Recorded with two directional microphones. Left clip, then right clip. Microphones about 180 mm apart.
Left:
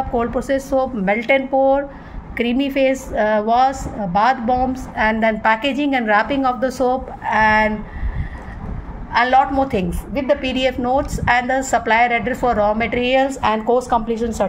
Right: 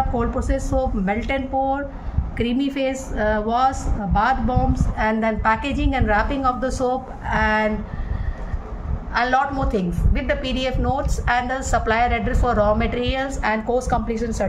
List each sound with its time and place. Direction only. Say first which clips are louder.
0.2 s a woman's voice: left 5 dB; 30° left (ahead or behind)
9.1 s a woman's voice: left 5 dB; 20° left (ahead or behind)